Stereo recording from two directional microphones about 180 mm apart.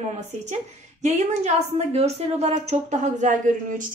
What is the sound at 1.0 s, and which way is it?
A woman's voice, 40° right (ahead or behind).